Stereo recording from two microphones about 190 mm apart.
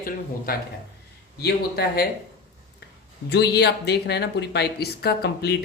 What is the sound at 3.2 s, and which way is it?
Speech, 60° left (ahead or behind).